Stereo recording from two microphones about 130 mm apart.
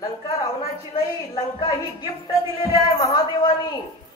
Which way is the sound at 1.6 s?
30° left (ahead or behind).